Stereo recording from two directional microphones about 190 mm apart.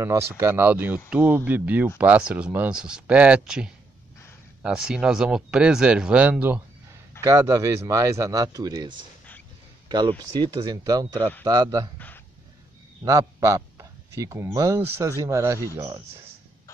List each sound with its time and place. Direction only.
0.0 s speech: 15° right (ahead or behind)
7.2 s speech: 20° right (ahead or behind)
13.0 s speech: 15° right (ahead or behind)